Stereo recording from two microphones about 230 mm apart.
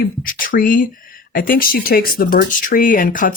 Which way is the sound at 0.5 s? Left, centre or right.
Left.